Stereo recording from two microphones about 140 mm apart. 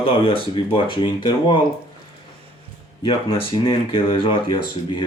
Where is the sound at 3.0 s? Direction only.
40° left (ahead or behind).